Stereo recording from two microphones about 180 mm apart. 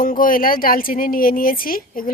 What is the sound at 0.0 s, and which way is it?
Speech, 50° left (ahead or behind).